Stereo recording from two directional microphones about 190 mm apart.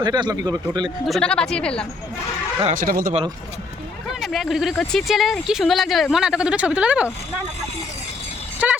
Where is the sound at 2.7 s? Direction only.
50° right (ahead or behind).